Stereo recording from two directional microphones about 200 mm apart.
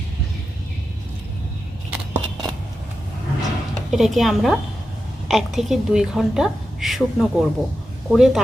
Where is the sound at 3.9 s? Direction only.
Centre (ahead or behind).